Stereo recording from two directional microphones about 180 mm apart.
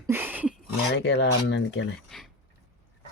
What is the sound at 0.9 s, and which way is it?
Speech, 70° left (ahead or behind).